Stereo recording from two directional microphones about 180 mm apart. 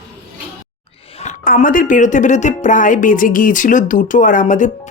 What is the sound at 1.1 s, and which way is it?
A woman's voice, 40° left (ahead or behind).